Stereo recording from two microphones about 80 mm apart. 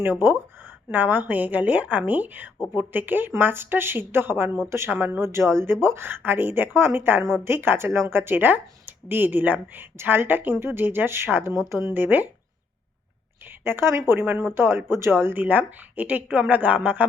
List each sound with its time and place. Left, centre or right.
0.0 s speech: right
13.4 s a woman's voice: right